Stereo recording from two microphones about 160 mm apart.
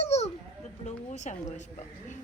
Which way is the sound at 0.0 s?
45° left (ahead or behind).